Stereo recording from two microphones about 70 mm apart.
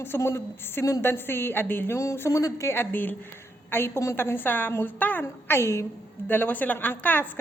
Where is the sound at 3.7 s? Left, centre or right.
Left.